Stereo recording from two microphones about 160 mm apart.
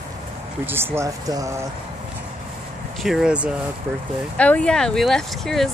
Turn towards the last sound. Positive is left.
turn(degrees=0)  # may be behind; listen again after turning